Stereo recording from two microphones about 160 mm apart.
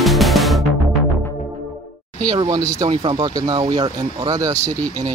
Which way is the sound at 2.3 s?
20° right (ahead or behind).